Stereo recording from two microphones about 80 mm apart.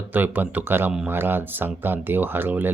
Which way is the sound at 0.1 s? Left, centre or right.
Right.